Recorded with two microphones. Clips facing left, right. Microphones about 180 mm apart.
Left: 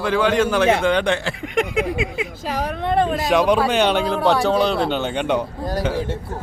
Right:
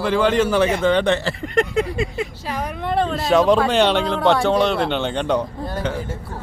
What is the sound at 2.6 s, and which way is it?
Speech, 20° left (ahead or behind).